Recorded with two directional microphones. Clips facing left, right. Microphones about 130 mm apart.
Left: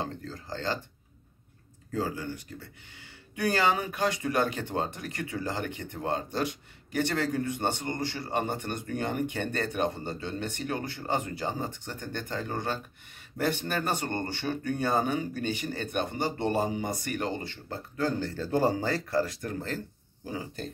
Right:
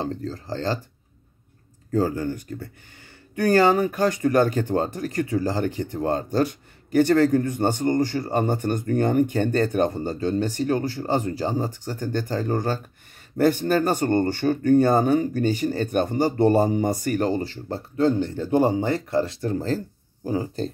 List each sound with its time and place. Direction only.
0.0 s speech: 35° right (ahead or behind)
1.9 s speech: 45° right (ahead or behind)